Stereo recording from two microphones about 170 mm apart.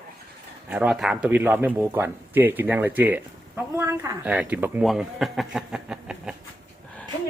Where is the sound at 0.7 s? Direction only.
5° right (ahead or behind).